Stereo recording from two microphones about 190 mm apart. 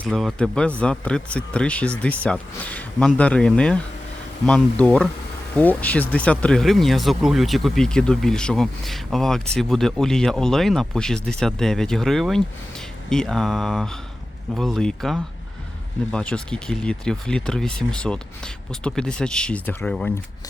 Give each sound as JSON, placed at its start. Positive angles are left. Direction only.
{"t": 0.0, "sound": "speech", "side_deg": 0}